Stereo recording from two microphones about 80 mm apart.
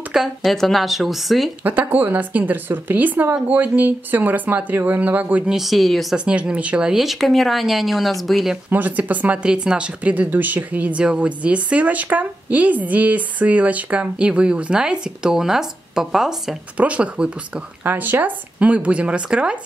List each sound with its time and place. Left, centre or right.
0.1 s speech: centre
1.6 s speech: right
5.5 s speech: centre
6.1 s speech: centre
8.6 s speech: right; by 16.5 s centre
16.7 s speech: centre